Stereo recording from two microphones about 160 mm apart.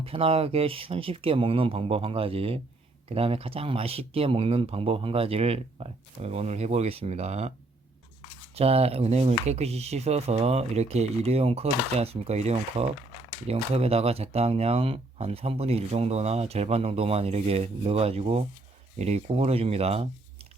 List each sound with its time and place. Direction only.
0.0 s speech: 35° right (ahead or behind)
8.5 s speech: 40° right (ahead or behind)